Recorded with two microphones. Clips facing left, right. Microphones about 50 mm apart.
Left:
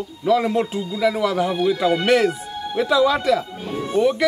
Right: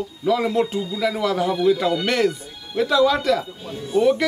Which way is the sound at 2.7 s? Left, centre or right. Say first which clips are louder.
Even; centre.